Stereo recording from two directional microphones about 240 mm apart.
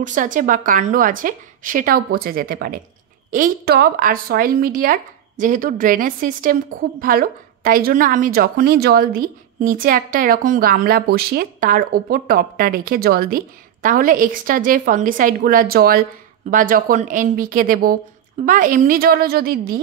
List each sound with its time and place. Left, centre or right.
0.0 s a woman's voice: right